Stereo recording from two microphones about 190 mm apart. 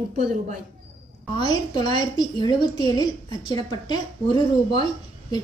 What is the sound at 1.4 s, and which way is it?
A woman's voice, 25° left (ahead or behind).